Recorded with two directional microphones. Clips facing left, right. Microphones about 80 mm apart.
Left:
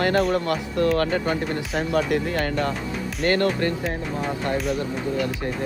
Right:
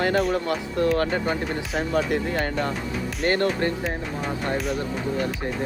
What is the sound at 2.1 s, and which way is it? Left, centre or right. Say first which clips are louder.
Speech: left 2 dB; right.